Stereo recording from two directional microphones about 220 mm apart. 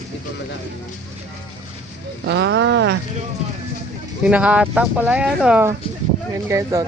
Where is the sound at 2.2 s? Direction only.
50° right (ahead or behind).